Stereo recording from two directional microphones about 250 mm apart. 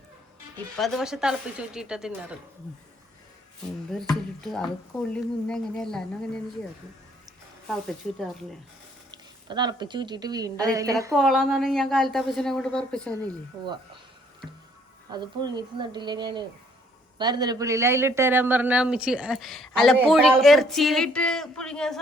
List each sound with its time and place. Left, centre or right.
0.8 s a woman's voice: centre
4.1 s a woman's voice: centre
7.7 s a woman's voice: centre
9.1 s speech: centre
11.1 s a woman's voice: centre
15.1 s a woman's voice: centre